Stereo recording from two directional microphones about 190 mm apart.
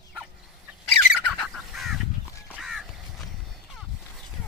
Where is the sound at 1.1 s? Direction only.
Centre (ahead or behind).